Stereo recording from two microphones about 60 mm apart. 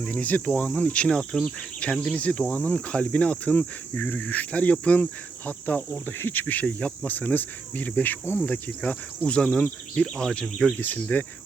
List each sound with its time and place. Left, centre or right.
0.0 s cricket: left
1.0 s insect: centre
2.1 s cricket: left
9.4 s insect: centre
10.4 s speech: centre
10.8 s cricket: left